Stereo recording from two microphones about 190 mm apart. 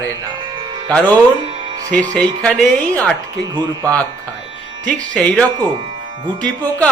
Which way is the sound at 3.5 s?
20° right (ahead or behind).